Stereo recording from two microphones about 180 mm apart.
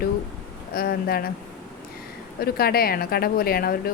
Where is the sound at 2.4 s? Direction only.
60° left (ahead or behind).